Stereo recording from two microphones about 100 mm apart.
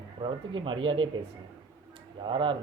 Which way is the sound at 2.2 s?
55° right (ahead or behind).